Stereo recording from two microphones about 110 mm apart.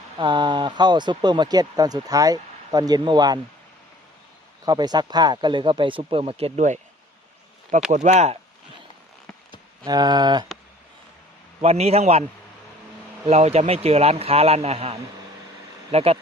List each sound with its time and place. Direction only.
0.2 s speech: 45° right (ahead or behind)
4.6 s speech: 40° right (ahead or behind); by 6.7 s 75° right (ahead or behind)
7.9 s speech: 90° right
9.8 s speech: 40° right (ahead or behind)
11.6 s a man's voice: 70° right (ahead or behind)
13.2 s a man's voice: 75° right (ahead or behind)